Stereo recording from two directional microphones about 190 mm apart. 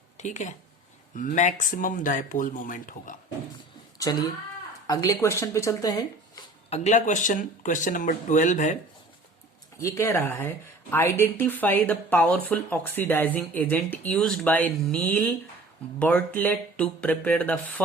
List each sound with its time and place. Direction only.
0.2 s speech: 40° left (ahead or behind)
3.9 s speech: 20° left (ahead or behind)
6.7 s speech: 35° left (ahead or behind)
9.7 s speech: 15° left (ahead or behind)